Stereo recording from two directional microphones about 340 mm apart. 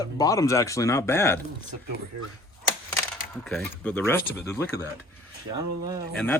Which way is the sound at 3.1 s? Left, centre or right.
Centre.